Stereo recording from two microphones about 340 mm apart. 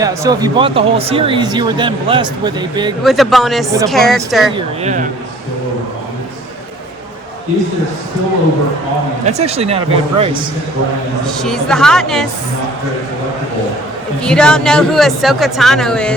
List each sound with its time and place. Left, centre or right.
0.0 s speech: centre
3.0 s a woman's voice: centre
4.5 s speech: centre
9.2 s speech: centre
11.3 s a woman's voice: centre
14.2 s a woman's voice: centre